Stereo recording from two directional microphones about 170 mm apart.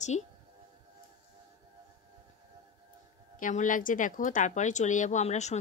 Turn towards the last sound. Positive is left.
turn(degrees=40)  # may be behind; listen again after turning